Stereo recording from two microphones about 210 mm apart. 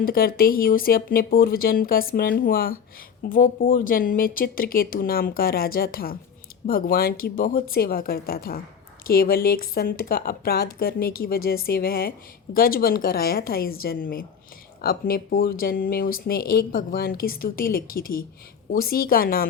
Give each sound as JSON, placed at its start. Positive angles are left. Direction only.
{"t": 0.0, "sound": "speech", "side_deg": 45}